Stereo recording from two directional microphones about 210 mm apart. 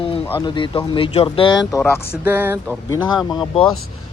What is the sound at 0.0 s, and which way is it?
Speech, 25° left (ahead or behind).